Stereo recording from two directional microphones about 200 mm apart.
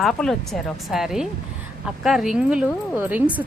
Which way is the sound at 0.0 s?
5° left (ahead or behind).